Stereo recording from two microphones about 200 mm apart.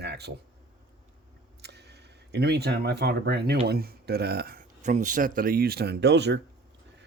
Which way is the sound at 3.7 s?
50° right (ahead or behind).